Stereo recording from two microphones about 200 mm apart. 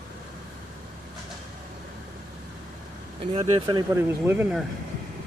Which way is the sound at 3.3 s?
30° right (ahead or behind).